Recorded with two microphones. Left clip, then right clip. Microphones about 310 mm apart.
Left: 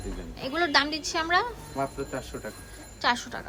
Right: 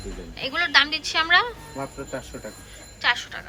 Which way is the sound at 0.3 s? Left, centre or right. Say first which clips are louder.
Right 5 dB; centre.